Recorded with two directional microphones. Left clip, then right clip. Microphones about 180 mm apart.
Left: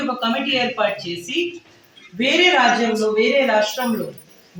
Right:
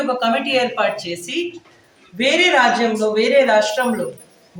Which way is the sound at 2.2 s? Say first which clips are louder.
Right 1 dB; 15° right (ahead or behind).